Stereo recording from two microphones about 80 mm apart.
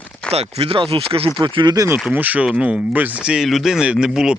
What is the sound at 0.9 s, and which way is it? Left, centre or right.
Speech, right.